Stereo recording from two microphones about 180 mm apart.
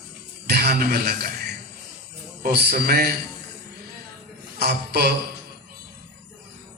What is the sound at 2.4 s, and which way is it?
Speech, 65° right (ahead or behind).